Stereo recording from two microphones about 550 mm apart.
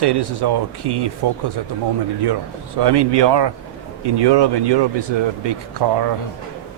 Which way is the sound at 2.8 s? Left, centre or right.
Right.